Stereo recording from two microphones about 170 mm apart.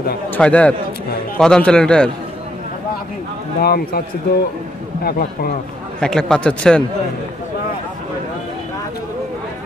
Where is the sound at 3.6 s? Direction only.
65° left (ahead or behind).